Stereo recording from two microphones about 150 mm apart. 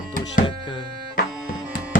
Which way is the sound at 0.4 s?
30° left (ahead or behind).